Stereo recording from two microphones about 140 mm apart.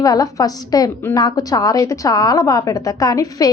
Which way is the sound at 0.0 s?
25° left (ahead or behind).